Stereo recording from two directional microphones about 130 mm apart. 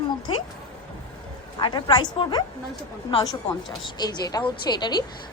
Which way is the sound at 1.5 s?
35° left (ahead or behind).